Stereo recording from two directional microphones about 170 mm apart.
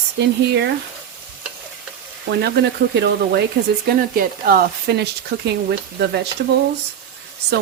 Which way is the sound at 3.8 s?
60° right (ahead or behind).